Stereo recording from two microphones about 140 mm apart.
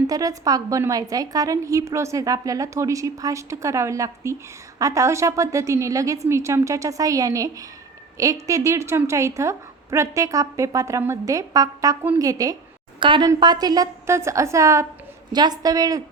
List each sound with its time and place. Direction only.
0.1 s a woman's voice: 25° right (ahead or behind)